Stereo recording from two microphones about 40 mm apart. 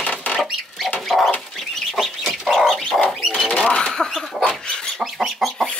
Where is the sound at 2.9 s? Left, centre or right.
Centre.